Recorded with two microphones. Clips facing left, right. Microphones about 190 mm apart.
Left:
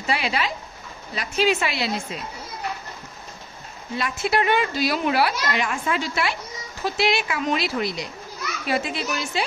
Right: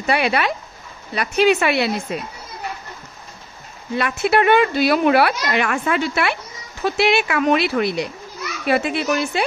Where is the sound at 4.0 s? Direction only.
65° right (ahead or behind).